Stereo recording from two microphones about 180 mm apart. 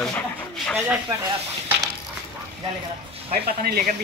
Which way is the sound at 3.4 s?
55° right (ahead or behind).